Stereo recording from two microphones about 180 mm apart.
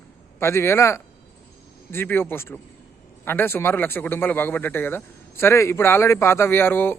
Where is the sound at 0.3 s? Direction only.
15° left (ahead or behind).